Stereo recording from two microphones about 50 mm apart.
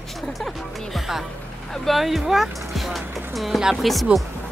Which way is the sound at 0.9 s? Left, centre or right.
Centre.